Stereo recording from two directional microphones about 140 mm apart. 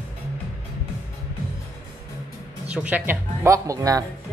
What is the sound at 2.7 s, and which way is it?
Speech, 10° right (ahead or behind).